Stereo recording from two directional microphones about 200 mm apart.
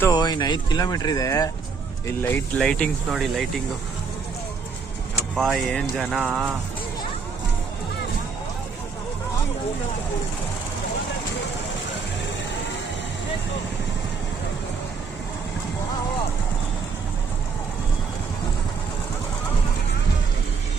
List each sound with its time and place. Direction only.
0.0 s speech: 20° left (ahead or behind); by 3.6 s centre (ahead or behind)
5.4 s speech: centre (ahead or behind)